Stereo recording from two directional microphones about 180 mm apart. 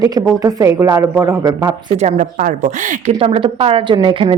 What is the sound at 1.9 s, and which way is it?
A woman's voice, 40° right (ahead or behind).